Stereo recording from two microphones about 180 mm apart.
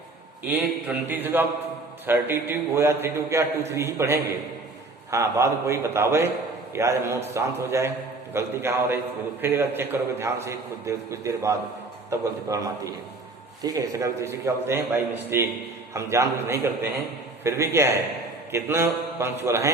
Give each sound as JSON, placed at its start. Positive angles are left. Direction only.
{"t": 0.4, "sound": "a man's voice", "side_deg": -10}